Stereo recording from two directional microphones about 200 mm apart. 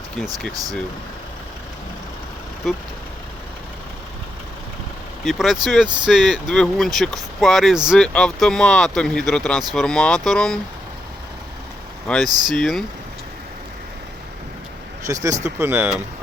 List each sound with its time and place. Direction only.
2.6 s speech: centre (ahead or behind)
5.2 s speech: centre (ahead or behind)
12.0 s speech: 5° left (ahead or behind)
12.3 s speech: 20° right (ahead or behind)
12.5 s speech: centre (ahead or behind)
15.0 s speech: 15° right (ahead or behind)